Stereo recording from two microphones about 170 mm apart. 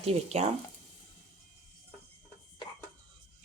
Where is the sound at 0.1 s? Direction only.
40° right (ahead or behind).